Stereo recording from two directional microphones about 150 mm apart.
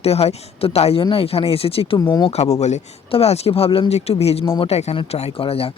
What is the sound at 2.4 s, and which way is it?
Speech, 50° left (ahead or behind).